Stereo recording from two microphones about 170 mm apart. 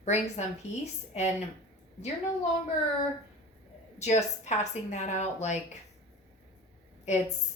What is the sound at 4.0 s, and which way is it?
Speech, 40° left (ahead or behind).